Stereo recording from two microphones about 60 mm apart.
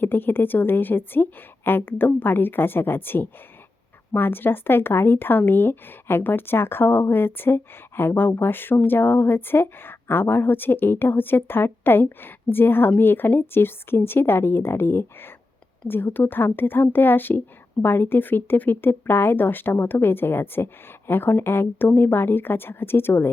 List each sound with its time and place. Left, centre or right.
0.0 s speech: left